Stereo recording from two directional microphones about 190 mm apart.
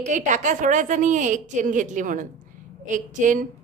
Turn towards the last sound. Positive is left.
turn(degrees=-40)  # may be behind; listen again after turning